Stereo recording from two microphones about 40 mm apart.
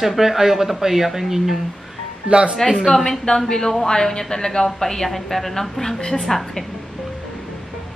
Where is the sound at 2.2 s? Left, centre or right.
Right.